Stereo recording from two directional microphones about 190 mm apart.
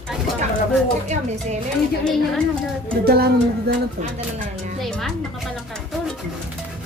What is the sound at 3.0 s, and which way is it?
Speech, 55° right (ahead or behind).